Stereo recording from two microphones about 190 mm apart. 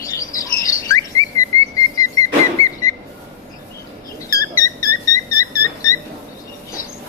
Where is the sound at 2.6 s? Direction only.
90° left.